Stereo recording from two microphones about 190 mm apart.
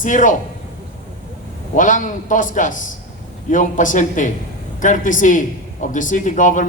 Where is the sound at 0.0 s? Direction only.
40° left (ahead or behind).